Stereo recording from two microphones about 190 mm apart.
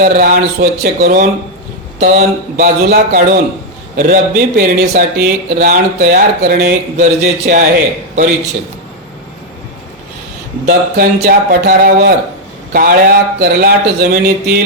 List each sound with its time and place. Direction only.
0.0 s speech: 50° right (ahead or behind)
10.7 s speech: 55° right (ahead or behind)